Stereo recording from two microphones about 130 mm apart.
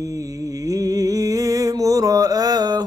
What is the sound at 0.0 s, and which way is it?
Music, 25° right (ahead or behind).